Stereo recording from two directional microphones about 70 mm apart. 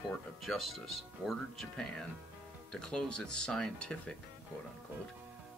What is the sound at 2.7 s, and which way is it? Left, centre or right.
Speech, centre.